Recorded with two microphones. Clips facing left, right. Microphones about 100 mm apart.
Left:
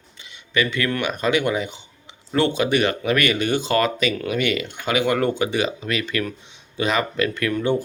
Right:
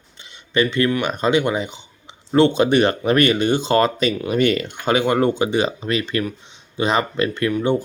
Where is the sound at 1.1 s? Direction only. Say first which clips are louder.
Right 2 dB; 25° right (ahead or behind).